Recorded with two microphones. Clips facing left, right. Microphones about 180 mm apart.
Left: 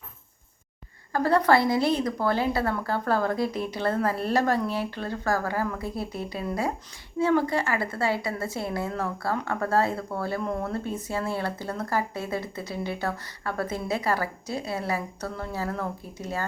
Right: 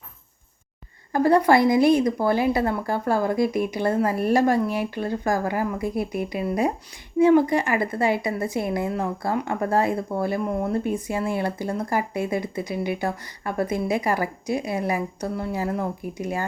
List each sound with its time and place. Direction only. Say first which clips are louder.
1.1 s a woman's voice: right 4 dB; 15° right (ahead or behind)